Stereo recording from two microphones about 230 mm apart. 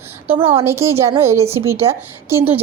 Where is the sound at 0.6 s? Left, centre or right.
Centre.